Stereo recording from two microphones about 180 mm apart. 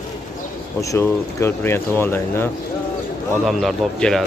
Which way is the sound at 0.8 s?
15° left (ahead or behind).